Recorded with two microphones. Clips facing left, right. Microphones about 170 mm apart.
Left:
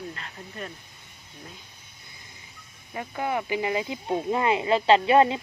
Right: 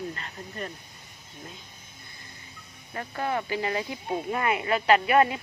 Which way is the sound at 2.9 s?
15° left (ahead or behind).